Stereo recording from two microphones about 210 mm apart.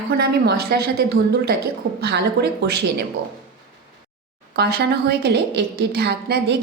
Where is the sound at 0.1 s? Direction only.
50° right (ahead or behind).